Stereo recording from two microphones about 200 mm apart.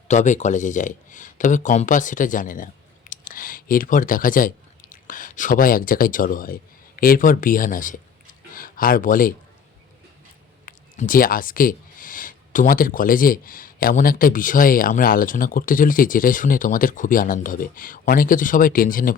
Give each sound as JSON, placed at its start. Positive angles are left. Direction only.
{"t": 0.1, "sound": "speech", "side_deg": 35}
{"t": 10.7, "sound": "speech", "side_deg": 45}